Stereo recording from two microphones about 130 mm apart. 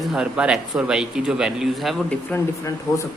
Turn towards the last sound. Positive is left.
turn(degrees=25)  # may be behind; listen again after turning